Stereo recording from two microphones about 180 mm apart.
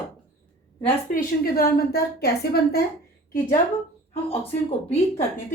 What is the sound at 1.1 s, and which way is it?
A woman's voice, 55° left (ahead or behind).